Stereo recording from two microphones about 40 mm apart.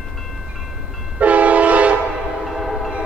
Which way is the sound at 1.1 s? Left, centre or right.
Right.